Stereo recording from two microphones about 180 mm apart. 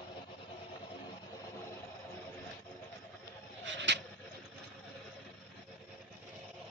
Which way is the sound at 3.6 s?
80° right.